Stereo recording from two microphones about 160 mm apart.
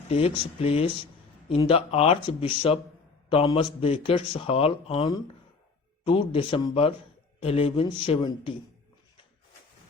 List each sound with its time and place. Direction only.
0.1 s a man's voice: 35° left (ahead or behind)